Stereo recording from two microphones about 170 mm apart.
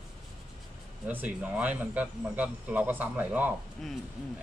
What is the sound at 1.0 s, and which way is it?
Speech, 10° right (ahead or behind).